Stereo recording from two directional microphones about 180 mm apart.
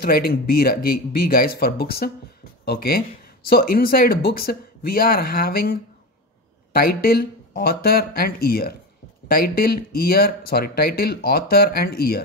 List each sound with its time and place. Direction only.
0.0 s speech: 60° left (ahead or behind)